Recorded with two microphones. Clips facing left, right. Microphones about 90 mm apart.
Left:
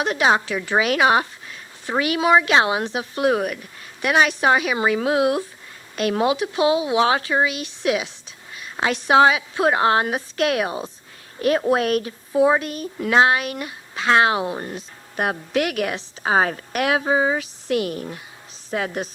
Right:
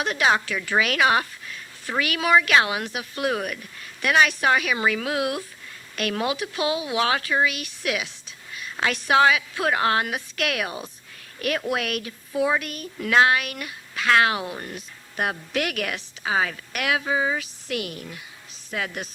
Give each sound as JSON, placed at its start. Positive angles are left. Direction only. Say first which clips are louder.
{"t": 0.0, "sound": "speech", "louder": "left 3 dB", "side_deg": 25}
{"t": 16.2, "sound": "speech", "louder": "left 5 dB", "side_deg": 40}